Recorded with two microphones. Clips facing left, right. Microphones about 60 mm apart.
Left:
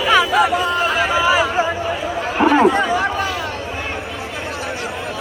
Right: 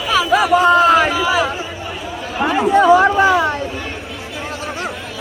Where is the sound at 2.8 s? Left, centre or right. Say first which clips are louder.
Right 8 dB; centre.